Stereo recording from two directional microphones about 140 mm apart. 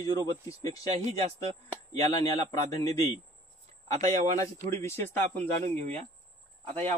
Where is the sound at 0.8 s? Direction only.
50° right (ahead or behind).